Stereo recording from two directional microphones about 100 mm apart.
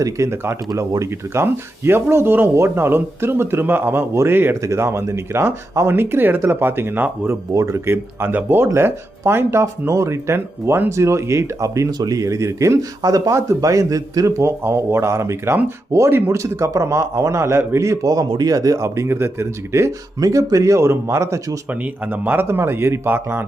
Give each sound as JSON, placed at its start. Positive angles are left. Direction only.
{"t": 0.0, "sound": "speech", "side_deg": -30}
{"t": 21.7, "sound": "speech", "side_deg": -15}